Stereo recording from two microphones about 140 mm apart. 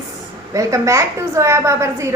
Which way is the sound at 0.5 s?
20° right (ahead or behind).